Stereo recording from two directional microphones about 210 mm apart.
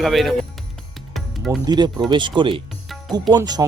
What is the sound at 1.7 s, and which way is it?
Speech, 20° right (ahead or behind).